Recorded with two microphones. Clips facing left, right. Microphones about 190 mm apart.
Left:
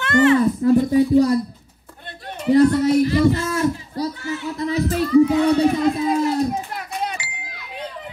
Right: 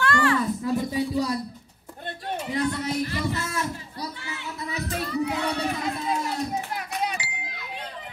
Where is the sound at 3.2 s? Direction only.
60° left (ahead or behind).